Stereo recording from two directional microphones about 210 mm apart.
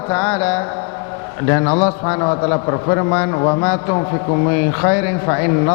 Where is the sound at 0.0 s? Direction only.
10° left (ahead or behind).